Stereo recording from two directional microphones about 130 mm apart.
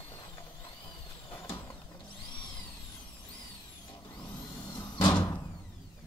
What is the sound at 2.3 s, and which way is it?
Vehicle, 40° left (ahead or behind).